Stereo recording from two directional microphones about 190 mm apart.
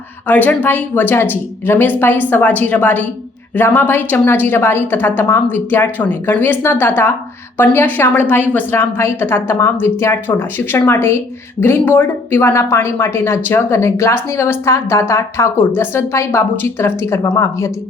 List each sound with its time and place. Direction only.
0.3 s speech: 10° left (ahead or behind)